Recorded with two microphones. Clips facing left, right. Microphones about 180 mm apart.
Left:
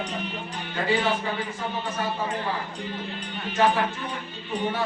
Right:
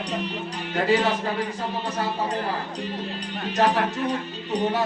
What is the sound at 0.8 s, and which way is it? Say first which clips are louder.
Speech: right 3 dB; 40° right (ahead or behind).